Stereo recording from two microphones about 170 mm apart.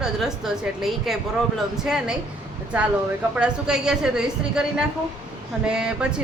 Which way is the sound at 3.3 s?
5° right (ahead or behind).